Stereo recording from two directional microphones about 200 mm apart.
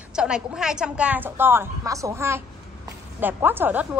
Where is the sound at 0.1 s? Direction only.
5° right (ahead or behind).